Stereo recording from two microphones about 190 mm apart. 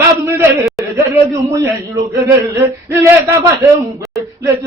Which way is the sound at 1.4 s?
15° right (ahead or behind).